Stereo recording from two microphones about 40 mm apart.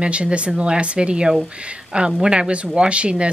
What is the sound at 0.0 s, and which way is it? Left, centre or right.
Speech, right.